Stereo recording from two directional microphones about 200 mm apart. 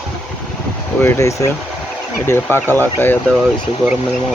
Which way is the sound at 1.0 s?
15° left (ahead or behind).